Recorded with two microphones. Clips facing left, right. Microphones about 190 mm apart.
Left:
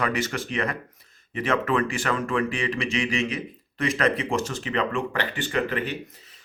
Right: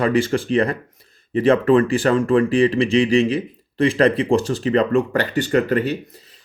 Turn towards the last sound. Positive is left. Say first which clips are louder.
# right 8 dB
turn(degrees=-40)  # may be behind; listen again after turning